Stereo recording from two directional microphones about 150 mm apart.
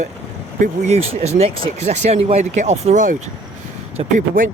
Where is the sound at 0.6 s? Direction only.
45° right (ahead or behind).